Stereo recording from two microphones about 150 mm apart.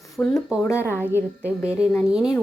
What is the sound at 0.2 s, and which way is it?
Speech, centre (ahead or behind).